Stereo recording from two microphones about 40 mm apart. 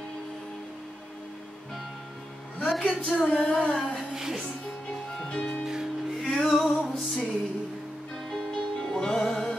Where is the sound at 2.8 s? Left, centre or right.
Left.